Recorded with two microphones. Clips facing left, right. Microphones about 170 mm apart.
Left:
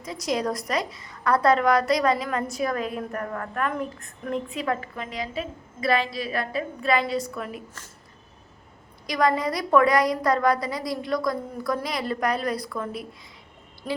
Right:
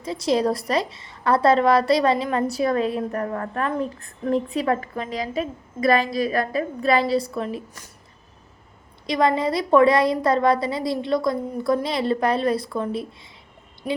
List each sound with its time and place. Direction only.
0.0 s a woman's voice: 30° right (ahead or behind)
9.0 s a woman's voice: 25° right (ahead or behind)
13.8 s speech: 10° right (ahead or behind)